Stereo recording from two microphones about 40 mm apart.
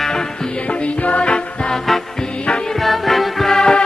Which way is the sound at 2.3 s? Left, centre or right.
Left.